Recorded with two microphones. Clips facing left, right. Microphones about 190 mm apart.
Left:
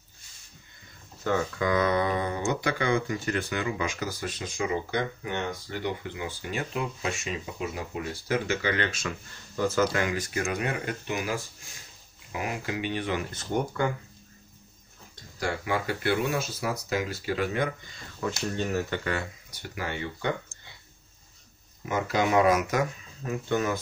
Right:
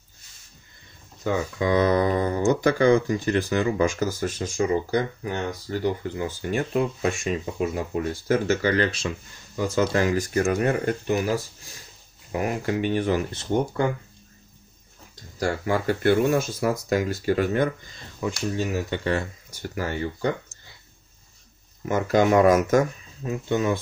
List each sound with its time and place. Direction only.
1.2 s speech: 15° right (ahead or behind)
1.7 s speech: 35° right (ahead or behind)
10.0 s speech: 45° right (ahead or behind)
13.3 s speech: 30° right (ahead or behind)
15.3 s speech: 40° right (ahead or behind)
18.2 s speech: 15° right (ahead or behind)
19.0 s speech: 40° right (ahead or behind)
21.8 s speech: 45° right (ahead or behind)
23.2 s speech: 25° right (ahead or behind)